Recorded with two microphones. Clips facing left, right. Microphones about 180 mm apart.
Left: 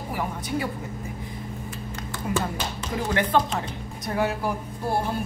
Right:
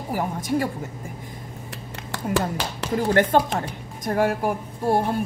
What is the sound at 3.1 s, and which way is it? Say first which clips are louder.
Speech: right 4 dB; 45° right (ahead or behind).